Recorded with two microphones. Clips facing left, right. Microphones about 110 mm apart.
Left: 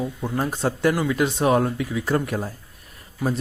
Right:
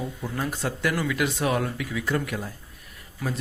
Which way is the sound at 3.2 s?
20° left (ahead or behind).